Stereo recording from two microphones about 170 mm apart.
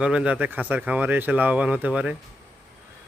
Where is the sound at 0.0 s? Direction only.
5° right (ahead or behind).